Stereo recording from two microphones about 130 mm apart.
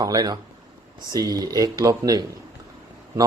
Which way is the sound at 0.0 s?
30° right (ahead or behind).